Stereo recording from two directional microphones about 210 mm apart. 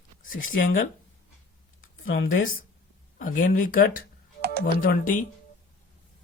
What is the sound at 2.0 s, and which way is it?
Speech, 70° left (ahead or behind).